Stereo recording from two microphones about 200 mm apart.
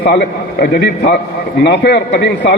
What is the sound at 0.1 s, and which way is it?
A man's voice, 50° left (ahead or behind).